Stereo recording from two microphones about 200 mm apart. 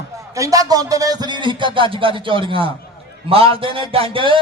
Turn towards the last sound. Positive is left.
turn(degrees=-25)  # may be behind; listen again after turning